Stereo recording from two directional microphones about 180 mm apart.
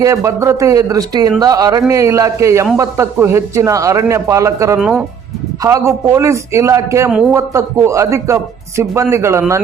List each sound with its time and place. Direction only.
0.0 s a man's voice: 15° right (ahead or behind)
4.8 s speech: 5° right (ahead or behind)
5.6 s a man's voice: 15° right (ahead or behind)